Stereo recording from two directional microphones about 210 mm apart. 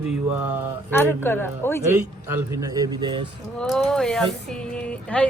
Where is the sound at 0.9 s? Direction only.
10° left (ahead or behind).